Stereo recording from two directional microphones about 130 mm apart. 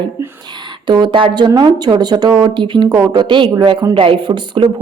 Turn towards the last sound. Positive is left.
turn(degrees=-40)  # may be behind; listen again after turning